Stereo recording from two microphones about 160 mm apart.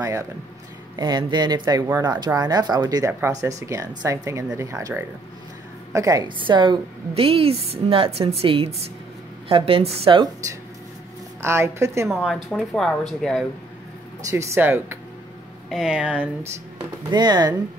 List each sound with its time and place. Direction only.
0.0 s a woman's voice: 20° right (ahead or behind)
11.4 s a woman's voice: 15° right (ahead or behind)
12.1 s speech: centre (ahead or behind)
14.3 s a woman's voice: 15° right (ahead or behind)
15.7 s speech: 5° right (ahead or behind)
17.1 s speech: 25° right (ahead or behind)